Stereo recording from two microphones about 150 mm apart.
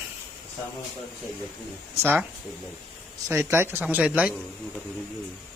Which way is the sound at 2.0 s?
15° right (ahead or behind).